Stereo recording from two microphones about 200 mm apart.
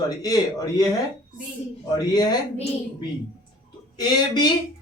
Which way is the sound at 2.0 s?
20° left (ahead or behind).